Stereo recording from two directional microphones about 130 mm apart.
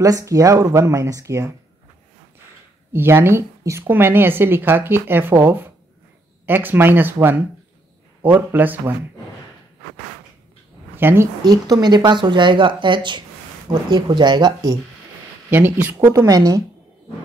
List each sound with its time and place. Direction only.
0.0 s speech: 25° right (ahead or behind)
2.9 s a woman's voice: 15° right (ahead or behind)
11.0 s a woman's voice: 15° right (ahead or behind)
11.4 s speech: 30° right (ahead or behind)
15.5 s a woman's voice: 15° right (ahead or behind)
16.1 s speech: 25° right (ahead or behind)